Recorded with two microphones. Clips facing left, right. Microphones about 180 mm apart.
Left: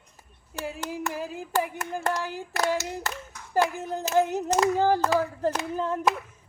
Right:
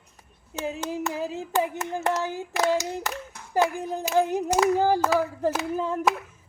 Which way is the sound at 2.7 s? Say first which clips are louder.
Right 3 dB; 15° right (ahead or behind).